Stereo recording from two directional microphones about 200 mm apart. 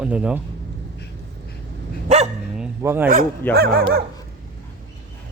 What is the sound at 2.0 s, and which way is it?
Dog, 35° right (ahead or behind).